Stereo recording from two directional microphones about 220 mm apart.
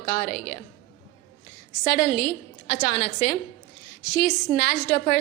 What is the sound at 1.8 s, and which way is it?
A woman's voice, 45° left (ahead or behind).